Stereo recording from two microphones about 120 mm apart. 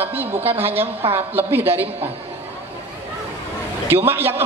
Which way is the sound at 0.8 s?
55° right (ahead or behind).